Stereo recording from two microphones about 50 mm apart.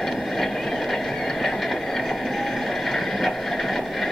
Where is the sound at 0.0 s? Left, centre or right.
Centre.